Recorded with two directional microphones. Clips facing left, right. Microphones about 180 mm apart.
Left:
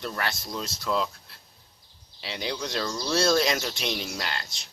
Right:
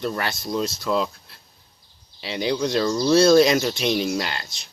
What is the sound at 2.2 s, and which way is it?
Speech, 5° right (ahead or behind).